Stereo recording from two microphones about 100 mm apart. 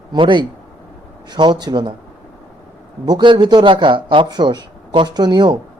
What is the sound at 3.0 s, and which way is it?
Speech, 45° right (ahead or behind).